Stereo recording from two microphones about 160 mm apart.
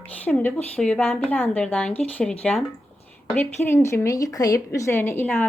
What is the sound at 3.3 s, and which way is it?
A woman's voice, 15° left (ahead or behind).